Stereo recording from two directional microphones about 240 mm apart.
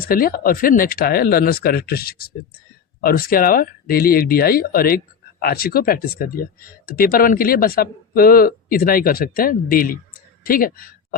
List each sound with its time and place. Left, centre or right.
0.1 s speech: left